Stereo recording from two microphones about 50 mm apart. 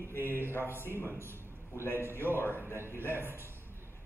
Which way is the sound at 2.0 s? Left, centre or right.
Right.